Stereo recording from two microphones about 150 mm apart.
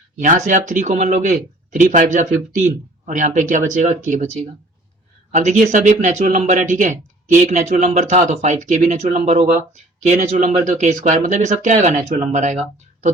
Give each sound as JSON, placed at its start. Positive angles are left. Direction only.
{"t": 0.2, "sound": "speech", "side_deg": -55}